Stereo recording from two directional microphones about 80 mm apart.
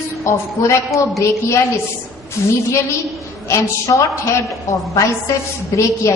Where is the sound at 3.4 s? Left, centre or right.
Left.